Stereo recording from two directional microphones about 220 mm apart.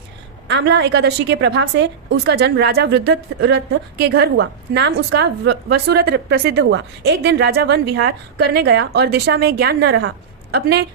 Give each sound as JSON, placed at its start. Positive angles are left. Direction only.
{"t": 0.4, "sound": "a woman's voice", "side_deg": -55}